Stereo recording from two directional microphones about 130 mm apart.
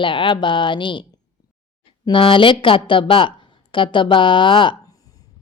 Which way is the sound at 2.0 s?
40° left (ahead or behind).